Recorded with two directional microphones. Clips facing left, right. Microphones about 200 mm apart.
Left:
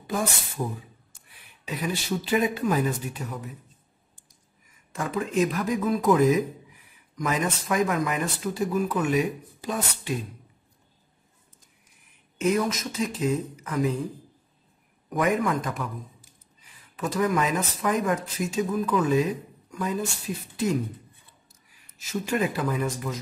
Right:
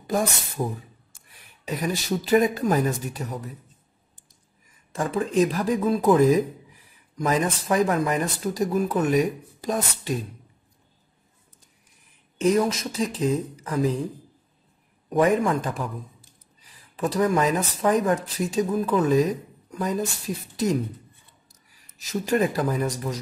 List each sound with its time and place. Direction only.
0.6 s speech: 40° right (ahead or behind)
4.9 s speech: 35° right (ahead or behind)
12.4 s speech: 30° right (ahead or behind)
15.0 s a man's voice: 30° right (ahead or behind)
21.9 s speech: 35° right (ahead or behind)